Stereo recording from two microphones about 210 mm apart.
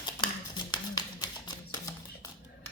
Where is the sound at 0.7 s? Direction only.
20° left (ahead or behind).